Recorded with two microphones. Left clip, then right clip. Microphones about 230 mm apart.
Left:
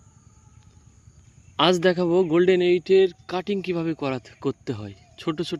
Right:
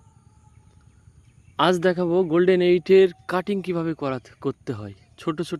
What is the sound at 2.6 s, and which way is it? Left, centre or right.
Speech, right.